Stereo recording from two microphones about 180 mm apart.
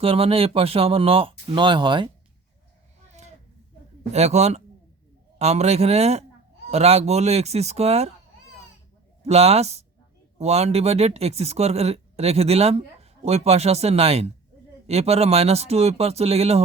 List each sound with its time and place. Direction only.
0.0 s speech: 30° right (ahead or behind)
3.1 s a sound: 40° right (ahead or behind)
4.1 s speech: 40° right (ahead or behind)
9.2 s speech: 35° right (ahead or behind)